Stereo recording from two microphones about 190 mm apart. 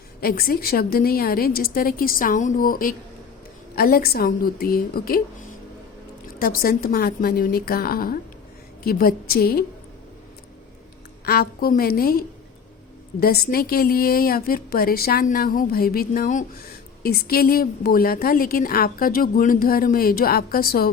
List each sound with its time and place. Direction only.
0.2 s a woman's voice: 50° left (ahead or behind)
6.4 s a woman's voice: 50° left (ahead or behind)
11.3 s a woman's voice: 50° left (ahead or behind)